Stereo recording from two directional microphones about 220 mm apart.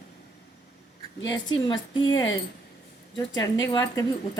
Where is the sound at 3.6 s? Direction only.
15° left (ahead or behind).